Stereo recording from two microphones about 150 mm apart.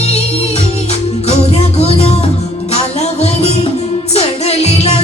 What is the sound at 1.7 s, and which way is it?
Music, 45° left (ahead or behind).